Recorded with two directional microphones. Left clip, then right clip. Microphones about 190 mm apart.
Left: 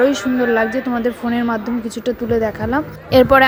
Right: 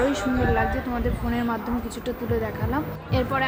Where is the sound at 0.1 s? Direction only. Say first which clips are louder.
Left 7 dB; 30° left (ahead or behind).